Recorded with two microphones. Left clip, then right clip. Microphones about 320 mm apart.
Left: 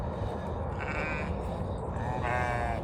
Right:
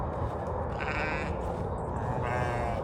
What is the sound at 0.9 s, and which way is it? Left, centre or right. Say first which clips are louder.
Sheep: right 1 dB; centre.